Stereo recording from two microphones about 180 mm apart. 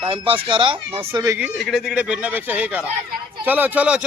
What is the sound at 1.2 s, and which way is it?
Speech, 15° right (ahead or behind).